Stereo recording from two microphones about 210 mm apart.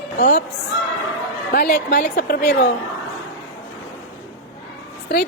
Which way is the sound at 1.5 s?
50° left (ahead or behind).